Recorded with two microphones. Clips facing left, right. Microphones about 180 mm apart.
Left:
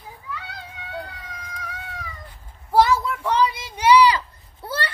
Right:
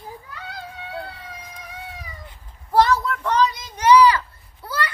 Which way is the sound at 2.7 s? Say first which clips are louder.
Even; 5° left (ahead or behind).